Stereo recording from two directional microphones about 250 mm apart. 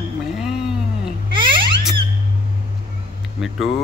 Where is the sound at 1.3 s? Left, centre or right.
Centre.